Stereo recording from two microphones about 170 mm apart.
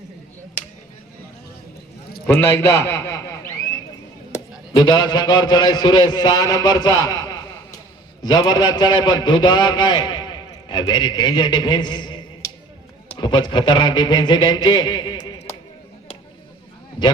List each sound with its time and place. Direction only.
2.2 s a man's voice: 15° left (ahead or behind)
4.7 s a man's voice: 25° left (ahead or behind)